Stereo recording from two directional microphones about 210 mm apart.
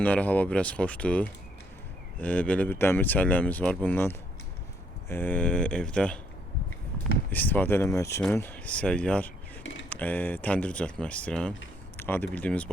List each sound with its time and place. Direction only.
0.0 s speech: 5° left (ahead or behind)
7.3 s speech: 10° left (ahead or behind)